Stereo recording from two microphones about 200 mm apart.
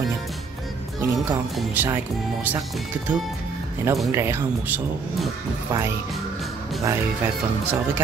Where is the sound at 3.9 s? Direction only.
10° right (ahead or behind).